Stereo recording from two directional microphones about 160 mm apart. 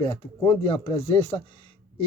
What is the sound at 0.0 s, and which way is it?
Speech, 35° left (ahead or behind).